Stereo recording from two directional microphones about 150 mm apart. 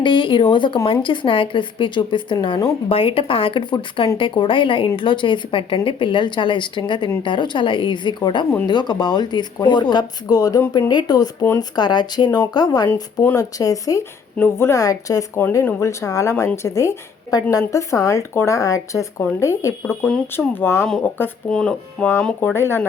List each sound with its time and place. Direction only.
0.0 s speech: 35° left (ahead or behind); by 20.8 s 15° left (ahead or behind)
20.8 s speech: 5° left (ahead or behind)
22.5 s speech: 15° left (ahead or behind)